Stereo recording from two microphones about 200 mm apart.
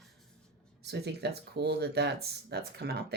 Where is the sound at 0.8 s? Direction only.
55° right (ahead or behind).